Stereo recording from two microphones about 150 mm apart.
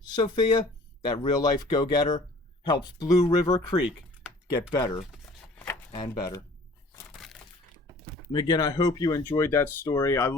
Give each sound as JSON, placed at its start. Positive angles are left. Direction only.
{"t": 0.2, "sound": "speech", "side_deg": 35}
{"t": 7.1, "sound": "a sound", "side_deg": 0}
{"t": 8.3, "sound": "speech", "side_deg": 30}